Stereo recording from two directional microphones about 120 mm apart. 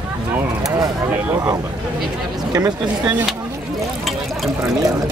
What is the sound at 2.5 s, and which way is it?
Speech, 35° right (ahead or behind).